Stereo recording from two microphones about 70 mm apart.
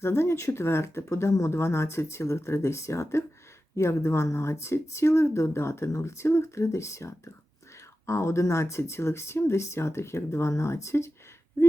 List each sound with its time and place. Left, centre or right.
0.0 s speech: left